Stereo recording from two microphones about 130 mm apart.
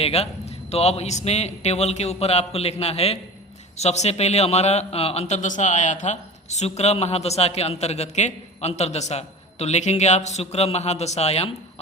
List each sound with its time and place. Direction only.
0.0 s a man's voice: 55° left (ahead or behind)